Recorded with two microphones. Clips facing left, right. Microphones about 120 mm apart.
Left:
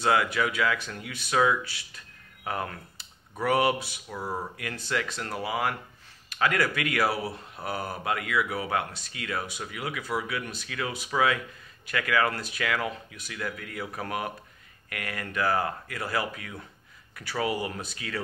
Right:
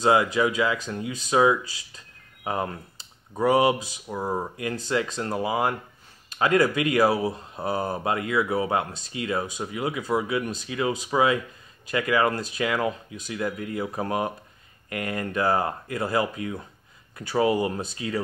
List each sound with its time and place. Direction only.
0.0 s speech: 20° right (ahead or behind)